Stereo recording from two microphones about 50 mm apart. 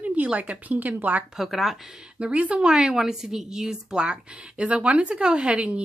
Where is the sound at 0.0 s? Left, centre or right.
Right.